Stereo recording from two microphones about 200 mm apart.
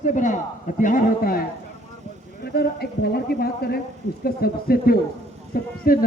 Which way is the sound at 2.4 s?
50° left (ahead or behind).